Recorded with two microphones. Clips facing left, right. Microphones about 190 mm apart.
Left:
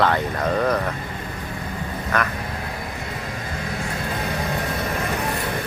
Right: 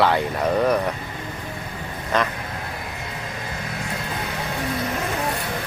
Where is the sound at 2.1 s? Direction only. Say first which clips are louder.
Right 2 dB; 20° right (ahead or behind).